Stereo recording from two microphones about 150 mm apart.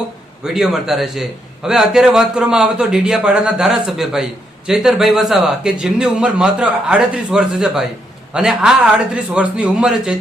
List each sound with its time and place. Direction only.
0.4 s a man's voice: 5° right (ahead or behind)